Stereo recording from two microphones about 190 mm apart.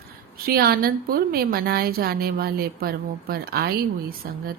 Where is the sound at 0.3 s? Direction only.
50° right (ahead or behind).